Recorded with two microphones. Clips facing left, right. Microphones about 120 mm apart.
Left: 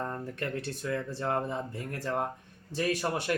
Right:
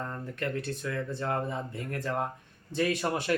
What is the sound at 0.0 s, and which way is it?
Speech, 25° left (ahead or behind).